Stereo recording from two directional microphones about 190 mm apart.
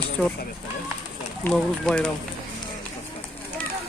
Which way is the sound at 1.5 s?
5° left (ahead or behind).